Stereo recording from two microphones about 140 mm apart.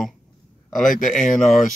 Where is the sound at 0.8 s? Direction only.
65° left (ahead or behind).